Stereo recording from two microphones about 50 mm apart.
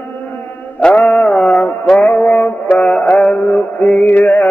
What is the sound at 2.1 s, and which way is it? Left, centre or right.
Music, left.